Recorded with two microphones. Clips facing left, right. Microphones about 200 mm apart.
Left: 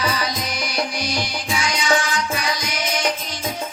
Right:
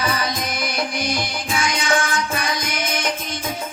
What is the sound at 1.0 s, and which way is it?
Music, 50° right (ahead or behind).